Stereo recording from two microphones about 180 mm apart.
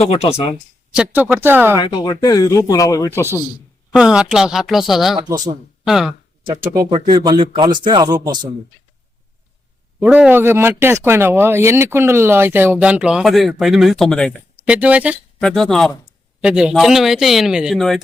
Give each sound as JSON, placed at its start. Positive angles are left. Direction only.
{"t": 0.0, "sound": "speech", "side_deg": 35}
{"t": 0.9, "sound": "speech", "side_deg": -10}
{"t": 1.8, "sound": "speech", "side_deg": 25}
{"t": 3.9, "sound": "a man's voice", "side_deg": -5}
{"t": 6.7, "sound": "speech", "side_deg": -25}
{"t": 10.0, "sound": "speech", "side_deg": -10}
{"t": 14.7, "sound": "speech", "side_deg": -10}
{"t": 15.4, "sound": "a man's voice", "side_deg": 5}